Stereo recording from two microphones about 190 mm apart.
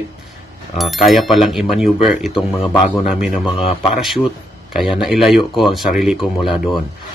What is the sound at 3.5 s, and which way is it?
Speech, 30° left (ahead or behind).